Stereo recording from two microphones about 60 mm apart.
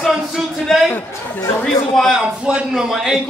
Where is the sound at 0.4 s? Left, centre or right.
Centre.